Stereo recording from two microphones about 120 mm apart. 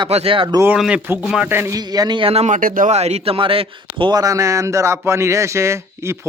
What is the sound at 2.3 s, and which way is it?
Speech, 80° right.